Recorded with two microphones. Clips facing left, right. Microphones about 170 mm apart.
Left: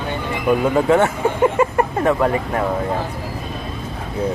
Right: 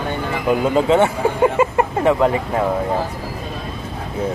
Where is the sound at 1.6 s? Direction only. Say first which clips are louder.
Even; 20° right (ahead or behind).